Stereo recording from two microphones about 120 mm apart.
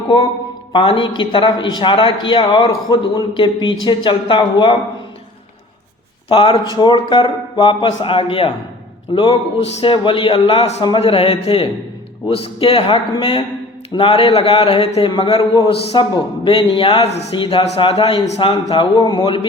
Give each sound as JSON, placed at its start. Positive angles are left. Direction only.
{"t": 0.7, "sound": "a man's voice", "side_deg": 45}
{"t": 6.2, "sound": "a man's voice", "side_deg": 45}
{"t": 15.4, "sound": "speech", "side_deg": 35}
{"t": 15.8, "sound": "a man's voice", "side_deg": 55}